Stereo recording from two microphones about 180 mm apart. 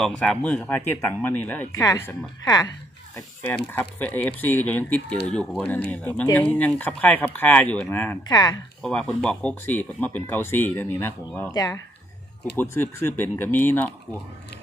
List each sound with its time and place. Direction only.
0.0 s speech: 5° left (ahead or behind)
3.7 s speech: 10° left (ahead or behind)
8.3 s speech: 25° left (ahead or behind)
8.8 s speech: 5° left (ahead or behind)